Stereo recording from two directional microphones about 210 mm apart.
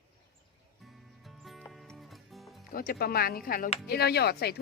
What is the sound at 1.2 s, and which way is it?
Music, centre (ahead or behind).